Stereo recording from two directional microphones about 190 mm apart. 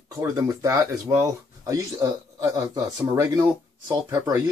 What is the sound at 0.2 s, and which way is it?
Speech, 15° right (ahead or behind).